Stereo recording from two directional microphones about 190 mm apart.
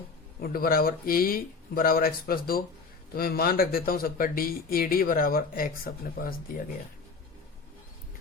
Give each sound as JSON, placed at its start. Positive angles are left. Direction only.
{"t": 0.4, "sound": "speech", "side_deg": 50}